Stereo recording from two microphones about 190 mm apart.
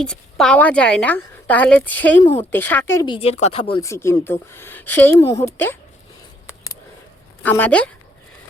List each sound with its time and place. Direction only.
0.0 s a woman's voice: 5° left (ahead or behind)
3.1 s speech: 30° left (ahead or behind)
3.8 s a woman's voice: 15° left (ahead or behind)
7.4 s a woman's voice: 10° left (ahead or behind)